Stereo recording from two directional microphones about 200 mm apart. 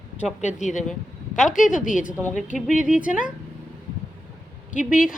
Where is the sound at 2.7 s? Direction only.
5° right (ahead or behind).